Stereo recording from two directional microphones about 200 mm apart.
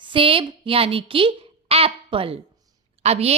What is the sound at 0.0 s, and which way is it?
A woman's voice, 25° right (ahead or behind).